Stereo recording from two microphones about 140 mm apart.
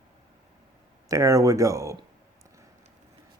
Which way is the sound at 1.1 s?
25° right (ahead or behind).